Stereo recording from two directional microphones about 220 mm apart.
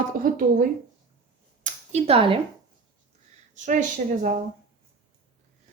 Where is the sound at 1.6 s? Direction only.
30° right (ahead or behind).